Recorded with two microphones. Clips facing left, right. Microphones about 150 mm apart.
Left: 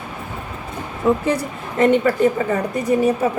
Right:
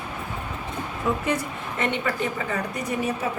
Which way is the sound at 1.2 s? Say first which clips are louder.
Left 5 dB; 40° left (ahead or behind).